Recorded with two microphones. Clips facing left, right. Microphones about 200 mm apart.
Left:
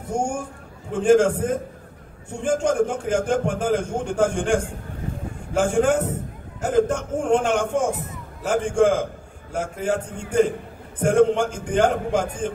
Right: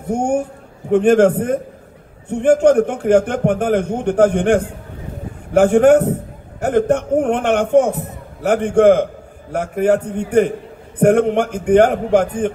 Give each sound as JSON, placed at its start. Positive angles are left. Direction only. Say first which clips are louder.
{"t": 0.1, "sound": "a man's voice", "louder": "right 7 dB", "side_deg": -60}